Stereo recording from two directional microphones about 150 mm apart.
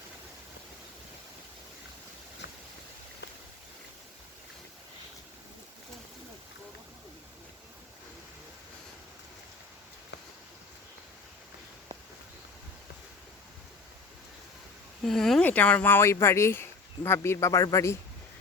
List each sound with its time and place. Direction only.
15.0 s speech: centre (ahead or behind); by 17.9 s 20° left (ahead or behind)